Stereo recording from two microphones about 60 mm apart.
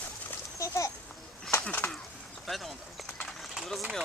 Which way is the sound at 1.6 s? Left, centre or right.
Left.